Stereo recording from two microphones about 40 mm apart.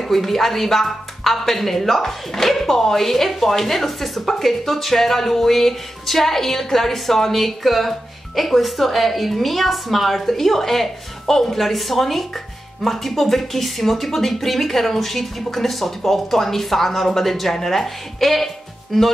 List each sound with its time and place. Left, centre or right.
0.0 s speech: centre